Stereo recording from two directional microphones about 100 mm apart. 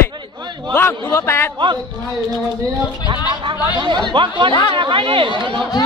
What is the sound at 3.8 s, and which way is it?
Speech, 50° right (ahead or behind).